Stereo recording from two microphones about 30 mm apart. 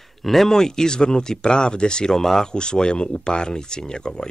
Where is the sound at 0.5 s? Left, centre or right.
Centre.